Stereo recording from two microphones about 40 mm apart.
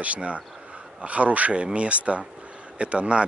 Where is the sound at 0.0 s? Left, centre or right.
Right.